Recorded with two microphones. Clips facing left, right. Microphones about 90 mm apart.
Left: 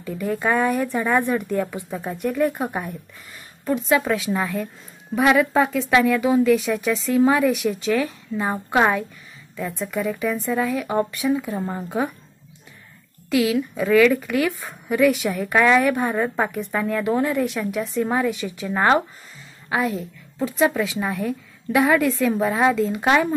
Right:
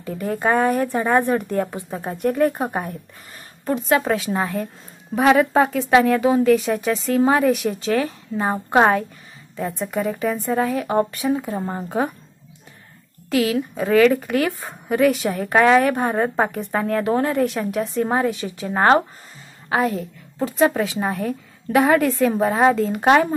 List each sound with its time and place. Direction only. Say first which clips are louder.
0.0 s a woman's voice: right 1 dB; 45° right (ahead or behind)
2.0 s a woman's voice: right 3 dB; 50° right (ahead or behind)
13.3 s a woman's voice: even; 45° right (ahead or behind)